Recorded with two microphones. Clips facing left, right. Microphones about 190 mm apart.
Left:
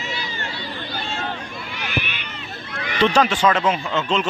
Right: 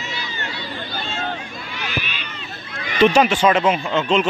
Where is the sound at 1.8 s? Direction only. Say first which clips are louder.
Left 1 dB; 55° left (ahead or behind).